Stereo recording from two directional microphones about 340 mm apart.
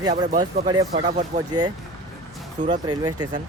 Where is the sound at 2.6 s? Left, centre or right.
Right.